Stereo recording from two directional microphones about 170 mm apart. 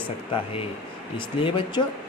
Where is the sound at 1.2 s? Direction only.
30° left (ahead or behind).